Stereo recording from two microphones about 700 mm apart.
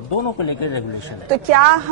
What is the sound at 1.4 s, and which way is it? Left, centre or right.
Speech, right.